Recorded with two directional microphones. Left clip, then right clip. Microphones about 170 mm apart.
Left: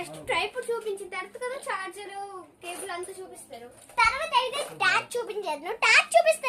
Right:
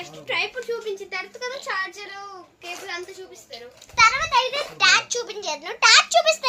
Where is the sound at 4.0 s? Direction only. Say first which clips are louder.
Right 6 dB; 10° left (ahead or behind).